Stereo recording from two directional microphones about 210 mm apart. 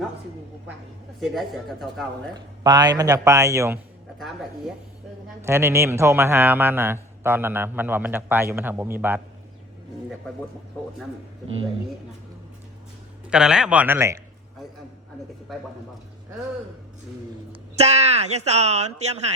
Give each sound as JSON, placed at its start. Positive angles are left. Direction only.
{"t": 1.2, "sound": "speech", "side_deg": 0}
{"t": 2.3, "sound": "a man's voice", "side_deg": -20}
{"t": 5.5, "sound": "a man's voice", "side_deg": -10}
{"t": 13.3, "sound": "speech", "side_deg": -5}
{"t": 17.5, "sound": "speech", "side_deg": -30}